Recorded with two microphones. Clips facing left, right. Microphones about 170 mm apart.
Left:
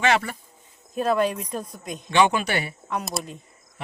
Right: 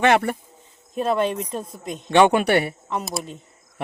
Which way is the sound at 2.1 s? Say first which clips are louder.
Right 5 dB; 60° right (ahead or behind).